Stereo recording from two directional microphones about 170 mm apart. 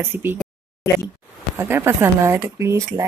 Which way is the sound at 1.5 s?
15° right (ahead or behind).